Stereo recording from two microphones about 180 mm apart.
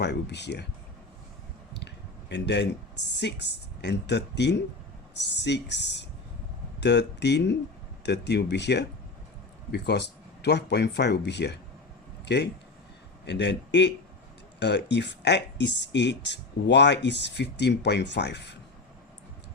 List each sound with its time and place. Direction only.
0.0 s speech: 70° left (ahead or behind)
2.3 s speech: 75° left (ahead or behind)